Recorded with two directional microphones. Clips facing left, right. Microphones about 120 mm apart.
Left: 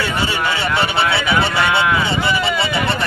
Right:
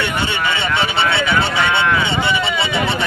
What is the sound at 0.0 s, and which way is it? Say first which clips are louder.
Speech: even; centre (ahead or behind).